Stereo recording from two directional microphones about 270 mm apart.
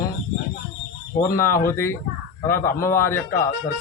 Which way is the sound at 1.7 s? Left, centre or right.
Centre.